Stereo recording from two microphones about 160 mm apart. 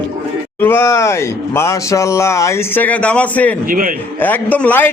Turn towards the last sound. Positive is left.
turn(degrees=10)  # may be behind; listen again after turning